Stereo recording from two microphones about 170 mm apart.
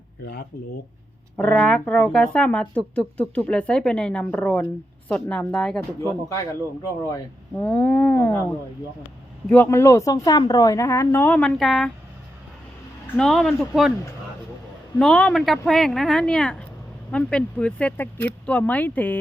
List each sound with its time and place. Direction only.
1.4 s speech: 5° left (ahead or behind)
6.0 s speech: 15° left (ahead or behind)
7.5 s speech: 10° left (ahead or behind)
13.1 s speech: 5° left (ahead or behind)
14.9 s speech: 5° left (ahead or behind)